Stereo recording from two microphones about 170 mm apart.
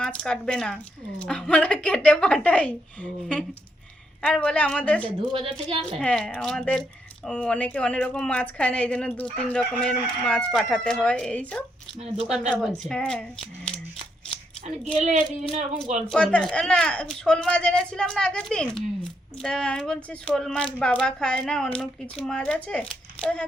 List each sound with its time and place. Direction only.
0.0 s a woman's voice: 5° left (ahead or behind)
5.0 s a woman's voice: 30° right (ahead or behind)
6.0 s a woman's voice: 5° left (ahead or behind)
14.9 s speech: 45° right (ahead or behind)
16.0 s speech: 5° left (ahead or behind)